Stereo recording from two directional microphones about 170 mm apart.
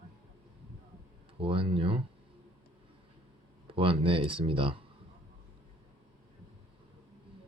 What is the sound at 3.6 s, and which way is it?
Speech, 30° right (ahead or behind).